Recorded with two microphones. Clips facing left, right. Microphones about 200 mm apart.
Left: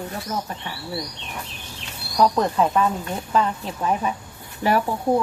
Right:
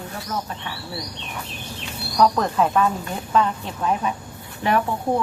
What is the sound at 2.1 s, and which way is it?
Speech, centre (ahead or behind).